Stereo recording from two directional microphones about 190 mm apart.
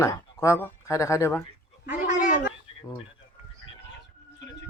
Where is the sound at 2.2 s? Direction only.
45° left (ahead or behind).